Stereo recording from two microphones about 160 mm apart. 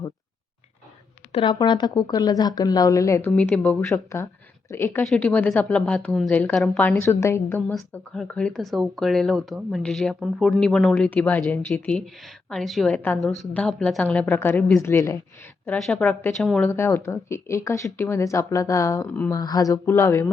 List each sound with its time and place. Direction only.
1.3 s a woman's voice: 30° left (ahead or behind)
7.9 s a woman's voice: 5° left (ahead or behind)
15.8 s a woman's voice: 5° left (ahead or behind)